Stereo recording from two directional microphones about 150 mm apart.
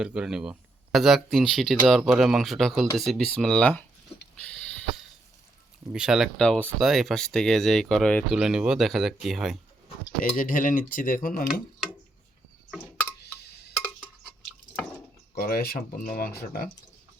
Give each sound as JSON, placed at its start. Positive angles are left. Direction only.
{"t": 0.0, "sound": "speech", "side_deg": -5}
{"t": 5.9, "sound": "speech", "side_deg": -5}
{"t": 10.2, "sound": "speech", "side_deg": 65}
{"t": 15.4, "sound": "speech", "side_deg": 80}